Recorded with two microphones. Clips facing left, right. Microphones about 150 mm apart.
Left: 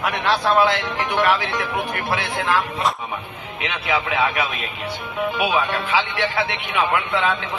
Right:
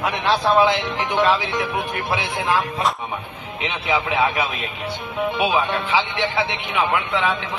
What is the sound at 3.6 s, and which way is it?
A man's voice, 25° right (ahead or behind).